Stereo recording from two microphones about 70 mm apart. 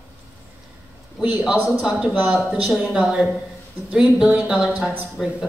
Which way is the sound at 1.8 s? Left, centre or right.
Centre.